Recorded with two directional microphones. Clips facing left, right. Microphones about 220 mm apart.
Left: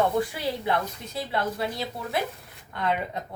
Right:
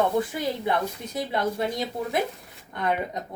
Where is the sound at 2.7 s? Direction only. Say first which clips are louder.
Right 1 dB; 15° right (ahead or behind).